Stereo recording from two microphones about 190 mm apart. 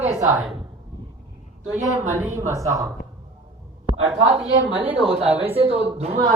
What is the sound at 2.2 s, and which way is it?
Speech, 15° right (ahead or behind).